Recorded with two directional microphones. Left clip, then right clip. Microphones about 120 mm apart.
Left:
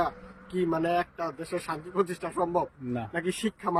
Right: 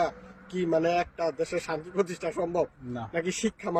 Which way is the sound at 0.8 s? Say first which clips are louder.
Right 2 dB; 45° left (ahead or behind).